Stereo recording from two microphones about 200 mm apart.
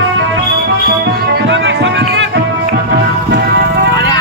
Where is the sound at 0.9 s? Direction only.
55° right (ahead or behind).